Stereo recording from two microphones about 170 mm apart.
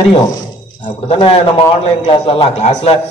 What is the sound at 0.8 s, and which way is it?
A man's voice, 30° left (ahead or behind).